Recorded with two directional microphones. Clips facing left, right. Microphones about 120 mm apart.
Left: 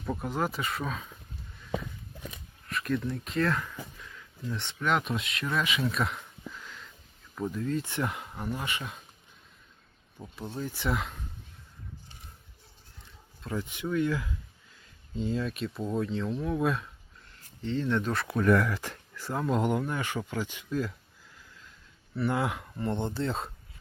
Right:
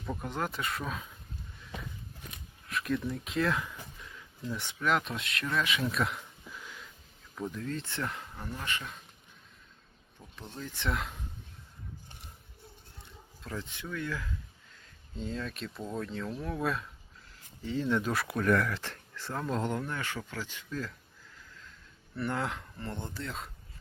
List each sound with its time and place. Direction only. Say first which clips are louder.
0.0 s speech: left 4 dB; 10° left (ahead or behind)
2.6 s speech: left 2 dB; centre (ahead or behind)
6.5 s wheeze: even; 10° right (ahead or behind)
7.3 s speech: left 5 dB; 5° left (ahead or behind)
10.3 s speech: left 6 dB; 10° left (ahead or behind)
13.4 s speech: left 6 dB; 10° left (ahead or behind)
15.1 s speech: left 6 dB; centre (ahead or behind)
22.3 s speech: left 4 dB; 10° left (ahead or behind)
22.9 s speech: left 9 dB; 25° left (ahead or behind)